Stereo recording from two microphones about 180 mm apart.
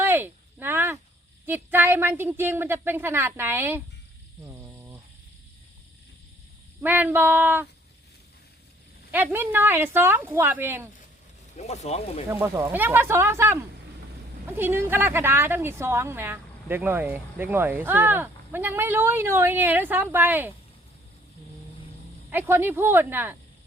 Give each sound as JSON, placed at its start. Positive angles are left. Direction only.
{"t": 0.0, "sound": "a sound", "side_deg": -10}
{"t": 1.5, "sound": "a woman's voice", "side_deg": -10}
{"t": 4.4, "sound": "a sound", "side_deg": -15}
{"t": 6.8, "sound": "a woman's voice", "side_deg": -10}
{"t": 9.1, "sound": "a woman's voice", "side_deg": -10}
{"t": 11.5, "sound": "speech", "side_deg": 40}
{"t": 12.3, "sound": "a woman's voice", "side_deg": -15}
{"t": 22.3, "sound": "a woman's voice", "side_deg": -15}